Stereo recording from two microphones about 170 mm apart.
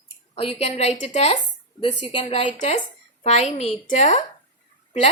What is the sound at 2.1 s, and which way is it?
A woman's voice, 40° left (ahead or behind).